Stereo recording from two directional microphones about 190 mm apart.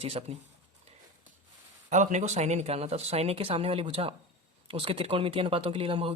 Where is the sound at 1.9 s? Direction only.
40° right (ahead or behind).